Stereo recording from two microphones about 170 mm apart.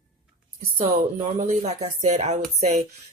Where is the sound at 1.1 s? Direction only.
40° right (ahead or behind).